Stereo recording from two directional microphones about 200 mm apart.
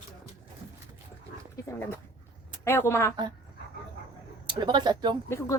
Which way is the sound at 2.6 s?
10° left (ahead or behind).